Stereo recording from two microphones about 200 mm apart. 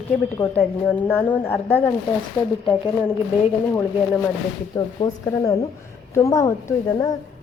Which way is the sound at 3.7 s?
10° left (ahead or behind).